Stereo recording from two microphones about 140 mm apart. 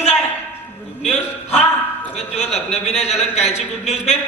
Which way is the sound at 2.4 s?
50° left (ahead or behind).